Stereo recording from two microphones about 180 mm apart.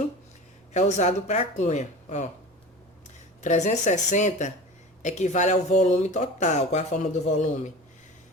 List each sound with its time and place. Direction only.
0.7 s speech: 40° left (ahead or behind)
3.4 s speech: 40° left (ahead or behind)